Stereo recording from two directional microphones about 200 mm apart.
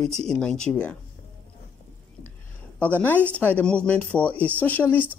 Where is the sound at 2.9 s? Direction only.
10° left (ahead or behind).